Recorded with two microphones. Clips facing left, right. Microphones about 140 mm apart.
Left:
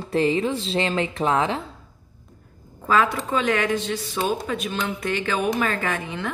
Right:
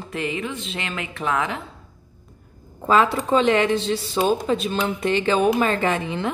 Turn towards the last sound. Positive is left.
turn(degrees=-25)  # may be behind; listen again after turning